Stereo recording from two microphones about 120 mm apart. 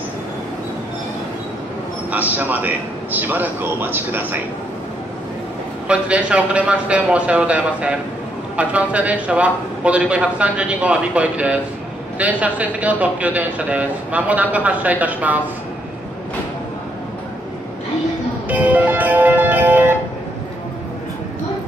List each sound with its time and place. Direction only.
2.0 s a man's voice: 15° right (ahead or behind)
5.9 s a man's voice: 10° right (ahead or behind)
18.5 s music: 10° right (ahead or behind)